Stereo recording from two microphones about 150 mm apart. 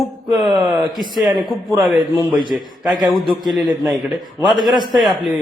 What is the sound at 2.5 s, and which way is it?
A man's voice, 10° right (ahead or behind).